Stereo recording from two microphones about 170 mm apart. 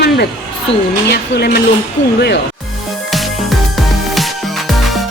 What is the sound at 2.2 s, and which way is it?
Speech, 90° left.